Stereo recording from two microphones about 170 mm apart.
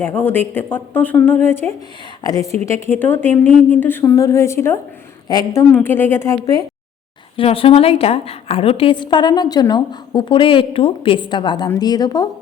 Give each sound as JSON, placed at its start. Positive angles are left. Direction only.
{"t": 0.0, "sound": "a woman's voice", "side_deg": 10}
{"t": 5.7, "sound": "a woman's voice", "side_deg": 10}
{"t": 7.3, "sound": "a woman's voice", "side_deg": 35}